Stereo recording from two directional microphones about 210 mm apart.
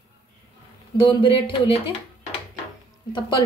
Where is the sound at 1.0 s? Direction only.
25° left (ahead or behind).